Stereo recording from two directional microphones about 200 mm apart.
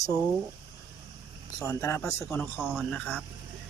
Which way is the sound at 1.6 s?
15° left (ahead or behind).